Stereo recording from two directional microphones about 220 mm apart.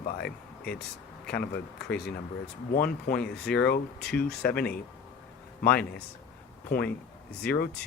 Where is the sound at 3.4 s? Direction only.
5° left (ahead or behind).